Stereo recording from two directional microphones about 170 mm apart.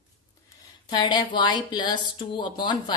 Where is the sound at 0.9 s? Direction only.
25° left (ahead or behind).